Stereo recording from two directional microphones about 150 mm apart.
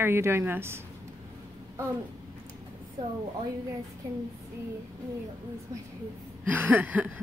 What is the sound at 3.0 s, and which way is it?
Speech, 25° right (ahead or behind).